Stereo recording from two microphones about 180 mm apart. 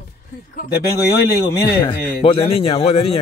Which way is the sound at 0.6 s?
60° left (ahead or behind).